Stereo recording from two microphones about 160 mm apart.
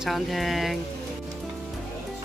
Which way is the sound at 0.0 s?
Centre (ahead or behind).